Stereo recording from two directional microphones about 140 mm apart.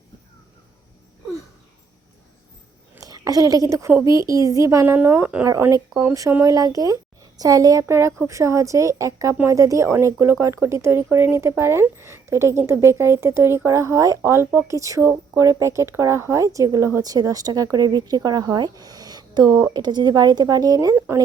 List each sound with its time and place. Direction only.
3.0 s a woman's voice: 25° right (ahead or behind)